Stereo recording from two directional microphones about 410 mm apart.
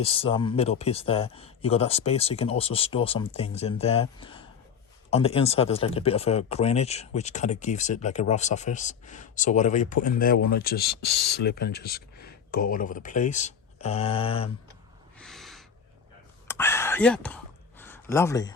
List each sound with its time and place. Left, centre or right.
0.0 s speech: centre
15.2 s snort: centre
16.5 s a sound: centre